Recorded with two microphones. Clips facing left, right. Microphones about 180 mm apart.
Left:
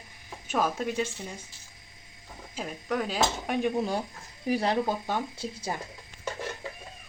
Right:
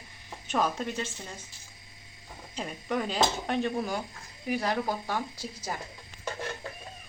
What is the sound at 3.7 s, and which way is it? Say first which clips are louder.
Speech: left 3 dB; 30° left (ahead or behind).